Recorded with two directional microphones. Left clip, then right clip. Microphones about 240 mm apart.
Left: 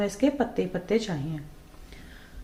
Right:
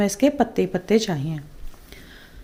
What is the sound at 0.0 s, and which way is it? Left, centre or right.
A woman's voice, right.